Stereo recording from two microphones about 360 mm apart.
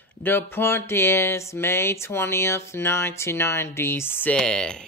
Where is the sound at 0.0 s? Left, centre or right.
Centre.